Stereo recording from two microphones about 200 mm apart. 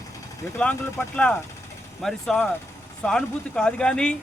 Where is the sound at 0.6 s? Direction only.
5° left (ahead or behind).